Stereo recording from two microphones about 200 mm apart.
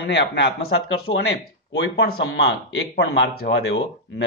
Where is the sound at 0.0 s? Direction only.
60° left (ahead or behind).